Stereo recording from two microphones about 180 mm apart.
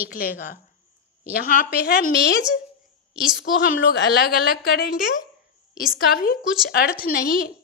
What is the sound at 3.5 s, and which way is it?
A woman's voice, 50° left (ahead or behind).